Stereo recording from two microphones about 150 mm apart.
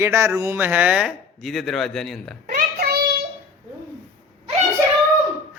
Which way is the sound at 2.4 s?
80° right.